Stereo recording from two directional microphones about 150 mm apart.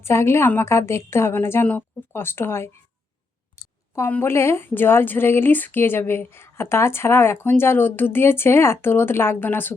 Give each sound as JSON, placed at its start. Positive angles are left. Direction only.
{"t": 0.0, "sound": "speech", "side_deg": 15}
{"t": 3.9, "sound": "speech", "side_deg": 15}